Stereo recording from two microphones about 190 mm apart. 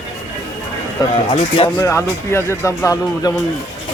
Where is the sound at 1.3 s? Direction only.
25° left (ahead or behind).